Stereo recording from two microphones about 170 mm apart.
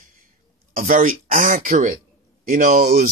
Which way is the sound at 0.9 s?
55° right (ahead or behind).